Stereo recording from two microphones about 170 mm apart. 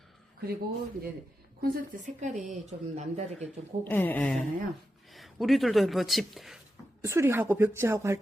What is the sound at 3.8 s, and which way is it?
Speech, 10° left (ahead or behind).